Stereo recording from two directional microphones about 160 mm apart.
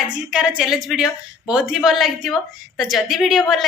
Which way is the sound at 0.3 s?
5° right (ahead or behind).